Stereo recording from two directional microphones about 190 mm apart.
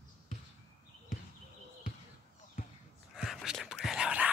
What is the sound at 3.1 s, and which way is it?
Whispering, centre (ahead or behind).